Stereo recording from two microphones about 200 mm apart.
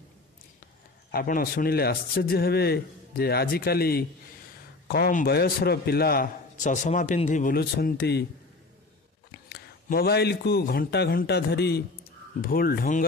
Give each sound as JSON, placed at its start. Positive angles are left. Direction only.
{"t": 1.1, "sound": "a man's voice", "side_deg": 45}
{"t": 9.3, "sound": "a man's voice", "side_deg": 50}